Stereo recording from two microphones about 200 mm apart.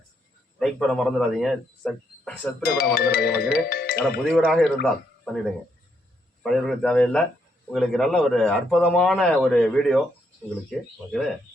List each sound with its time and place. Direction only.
0.6 s a man's voice: centre (ahead or behind)
2.6 s speech: 50° left (ahead or behind)
4.3 s a man's voice: centre (ahead or behind)
6.4 s a man's voice: centre (ahead or behind)